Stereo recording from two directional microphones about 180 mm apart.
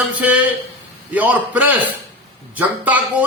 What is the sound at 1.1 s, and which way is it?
A man's voice, 10° right (ahead or behind).